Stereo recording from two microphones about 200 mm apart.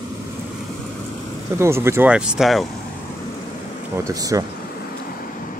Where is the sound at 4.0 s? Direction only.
15° right (ahead or behind).